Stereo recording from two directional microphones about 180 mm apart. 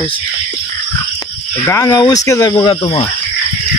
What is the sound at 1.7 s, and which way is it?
Speech, 20° left (ahead or behind).